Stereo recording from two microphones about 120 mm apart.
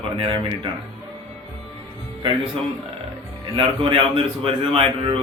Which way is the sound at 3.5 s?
45° right (ahead or behind).